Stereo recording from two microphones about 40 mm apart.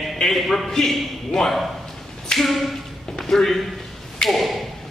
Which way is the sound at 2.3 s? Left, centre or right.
Centre.